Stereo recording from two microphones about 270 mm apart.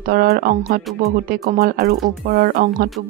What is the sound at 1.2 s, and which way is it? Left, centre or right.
Speech, right.